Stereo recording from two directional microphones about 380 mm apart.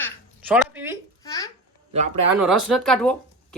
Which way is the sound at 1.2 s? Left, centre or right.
Centre.